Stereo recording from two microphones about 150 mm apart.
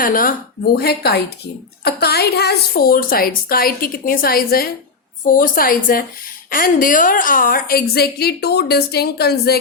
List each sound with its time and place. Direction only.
0.0 s a woman's voice: 70° left (ahead or behind)
5.2 s a woman's voice: 70° left (ahead or behind); by 9.6 s 90° left